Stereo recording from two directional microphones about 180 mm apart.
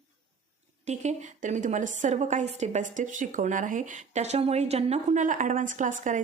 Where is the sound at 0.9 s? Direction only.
40° right (ahead or behind).